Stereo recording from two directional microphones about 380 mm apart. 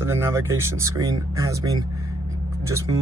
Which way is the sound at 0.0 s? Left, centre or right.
Centre.